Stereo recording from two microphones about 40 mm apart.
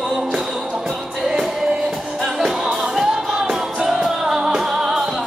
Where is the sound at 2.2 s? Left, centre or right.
Centre.